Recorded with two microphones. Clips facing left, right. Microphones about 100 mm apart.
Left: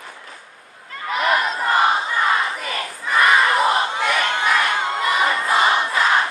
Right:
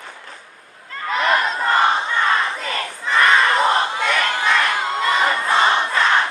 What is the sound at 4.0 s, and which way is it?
Crowd, 30° left (ahead or behind).